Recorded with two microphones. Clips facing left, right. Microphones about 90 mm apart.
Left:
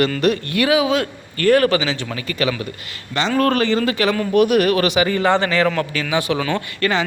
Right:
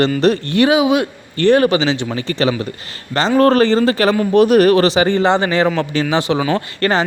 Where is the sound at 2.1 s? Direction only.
30° right (ahead or behind).